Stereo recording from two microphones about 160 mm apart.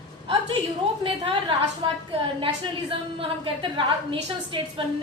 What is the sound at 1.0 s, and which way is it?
Speech, 35° right (ahead or behind).